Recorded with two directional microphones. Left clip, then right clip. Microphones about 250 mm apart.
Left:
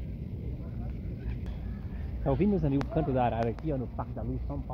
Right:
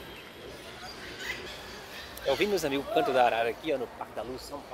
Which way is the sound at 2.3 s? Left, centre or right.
Centre.